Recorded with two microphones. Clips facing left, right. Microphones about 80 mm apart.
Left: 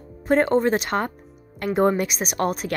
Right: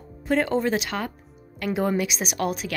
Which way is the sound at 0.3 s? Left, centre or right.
Left.